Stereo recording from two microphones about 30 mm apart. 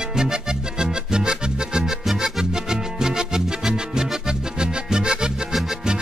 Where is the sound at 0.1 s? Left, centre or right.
Right.